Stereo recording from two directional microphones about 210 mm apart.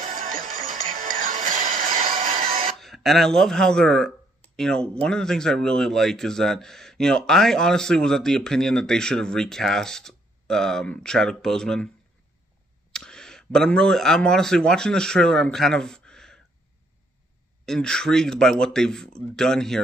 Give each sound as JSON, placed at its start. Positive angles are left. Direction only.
{"t": 0.0, "sound": "music", "side_deg": -40}
{"t": 2.8, "sound": "a man's voice", "side_deg": 0}
{"t": 12.9, "sound": "speech", "side_deg": 5}
{"t": 17.6, "sound": "a man's voice", "side_deg": 5}